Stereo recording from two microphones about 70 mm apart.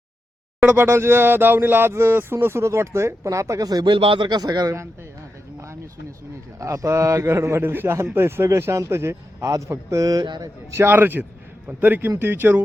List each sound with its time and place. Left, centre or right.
0.6 s speech: centre
0.9 s speech: right
4.3 s a man's voice: right
5.5 s a sound: right
6.6 s a man's voice: right
10.4 s a man's voice: right